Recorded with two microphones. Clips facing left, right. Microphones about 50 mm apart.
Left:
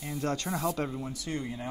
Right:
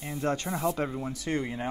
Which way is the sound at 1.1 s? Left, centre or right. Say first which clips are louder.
Right 4 dB; right.